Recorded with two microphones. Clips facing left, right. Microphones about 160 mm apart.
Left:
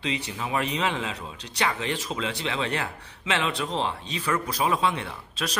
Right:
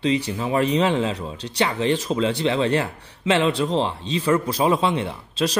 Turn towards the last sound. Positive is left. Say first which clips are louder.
# right 9 dB
turn(degrees=-25)  # may be behind; listen again after turning